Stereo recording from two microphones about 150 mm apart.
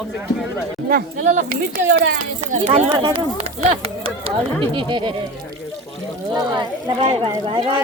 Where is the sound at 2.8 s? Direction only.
30° right (ahead or behind).